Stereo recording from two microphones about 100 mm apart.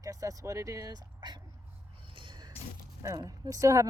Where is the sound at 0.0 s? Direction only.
35° right (ahead or behind).